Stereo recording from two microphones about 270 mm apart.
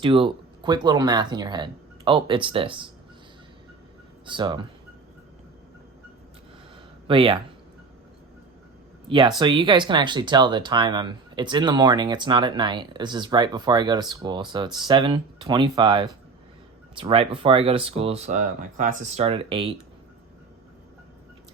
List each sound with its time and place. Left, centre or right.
0.0 s speech: centre
4.3 s speech: centre
7.1 s speech: centre
9.0 s speech: centre